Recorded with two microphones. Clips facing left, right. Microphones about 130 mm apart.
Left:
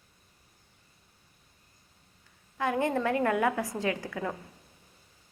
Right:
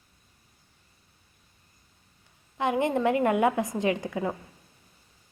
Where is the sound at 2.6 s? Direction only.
20° right (ahead or behind).